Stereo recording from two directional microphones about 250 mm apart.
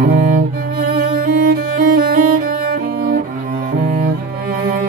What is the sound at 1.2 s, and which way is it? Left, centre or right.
Music, right.